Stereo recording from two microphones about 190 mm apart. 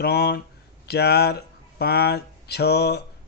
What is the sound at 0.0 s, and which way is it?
Speech, 55° left (ahead or behind).